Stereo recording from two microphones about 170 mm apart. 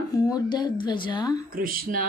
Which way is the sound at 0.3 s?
25° left (ahead or behind).